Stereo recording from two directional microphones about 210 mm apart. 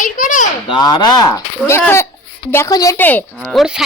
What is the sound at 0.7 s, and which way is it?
A woman's voice, 20° left (ahead or behind).